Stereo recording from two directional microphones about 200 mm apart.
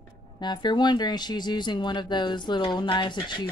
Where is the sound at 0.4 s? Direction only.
20° left (ahead or behind).